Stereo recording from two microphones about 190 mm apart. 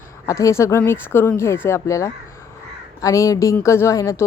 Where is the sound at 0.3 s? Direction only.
15° left (ahead or behind).